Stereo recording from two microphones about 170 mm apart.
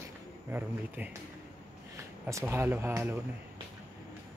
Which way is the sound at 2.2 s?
15° right (ahead or behind).